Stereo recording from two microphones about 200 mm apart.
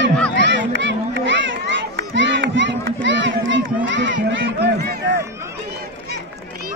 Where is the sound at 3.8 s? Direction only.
65° right (ahead or behind).